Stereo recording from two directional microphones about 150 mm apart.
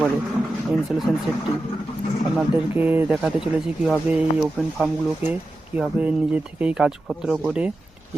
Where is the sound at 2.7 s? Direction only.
15° right (ahead or behind).